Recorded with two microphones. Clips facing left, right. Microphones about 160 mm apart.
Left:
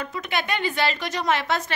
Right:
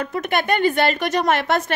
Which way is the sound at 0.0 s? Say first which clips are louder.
Right 6 dB; 50° right (ahead or behind).